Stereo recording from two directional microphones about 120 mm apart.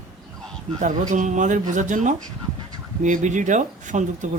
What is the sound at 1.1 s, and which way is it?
Speech, 90° right.